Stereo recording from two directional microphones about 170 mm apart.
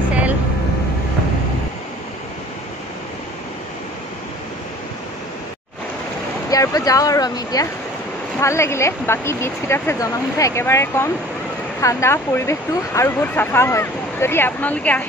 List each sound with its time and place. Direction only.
6.5 s speech: 20° left (ahead or behind)